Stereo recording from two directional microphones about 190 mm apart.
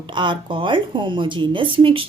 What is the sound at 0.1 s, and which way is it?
Speech, 25° right (ahead or behind).